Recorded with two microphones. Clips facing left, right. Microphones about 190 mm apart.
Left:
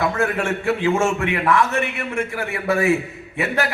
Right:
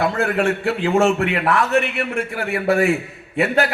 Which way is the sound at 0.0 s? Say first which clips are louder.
Right 2 dB; 35° right (ahead or behind).